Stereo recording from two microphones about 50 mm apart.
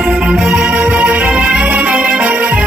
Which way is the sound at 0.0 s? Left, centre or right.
Right.